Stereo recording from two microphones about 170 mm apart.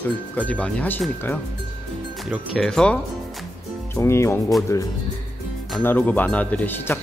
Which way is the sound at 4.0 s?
15° left (ahead or behind).